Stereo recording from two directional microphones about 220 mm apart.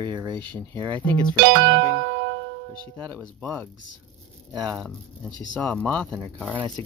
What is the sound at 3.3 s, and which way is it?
Speech, 5° left (ahead or behind).